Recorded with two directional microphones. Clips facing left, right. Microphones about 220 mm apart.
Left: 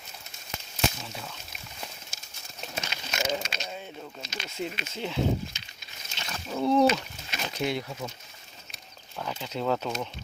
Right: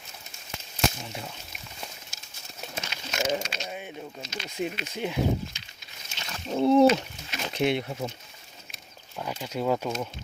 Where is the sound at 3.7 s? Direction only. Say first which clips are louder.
Right 2 dB; 15° right (ahead or behind).